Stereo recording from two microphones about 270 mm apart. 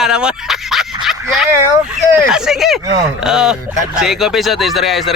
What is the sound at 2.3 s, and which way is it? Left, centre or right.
Speech, centre.